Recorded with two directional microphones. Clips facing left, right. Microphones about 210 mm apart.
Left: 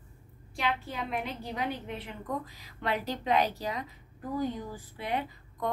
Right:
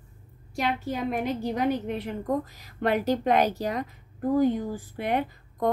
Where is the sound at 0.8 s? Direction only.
45° right (ahead or behind).